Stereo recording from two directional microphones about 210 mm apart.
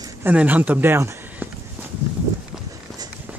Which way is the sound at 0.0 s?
10° right (ahead or behind).